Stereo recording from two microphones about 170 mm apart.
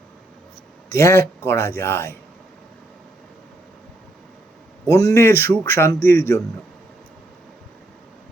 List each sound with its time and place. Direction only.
0.9 s a man's voice: 15° left (ahead or behind)
4.9 s a man's voice: 20° left (ahead or behind)